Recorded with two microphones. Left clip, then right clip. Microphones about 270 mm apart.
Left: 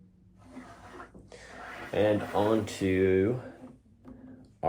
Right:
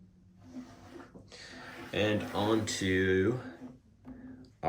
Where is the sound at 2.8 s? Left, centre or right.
Left.